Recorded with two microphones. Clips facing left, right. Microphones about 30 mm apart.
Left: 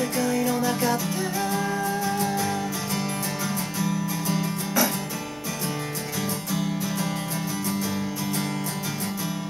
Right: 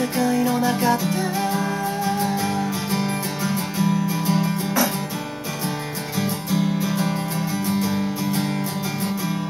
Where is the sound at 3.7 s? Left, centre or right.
Right.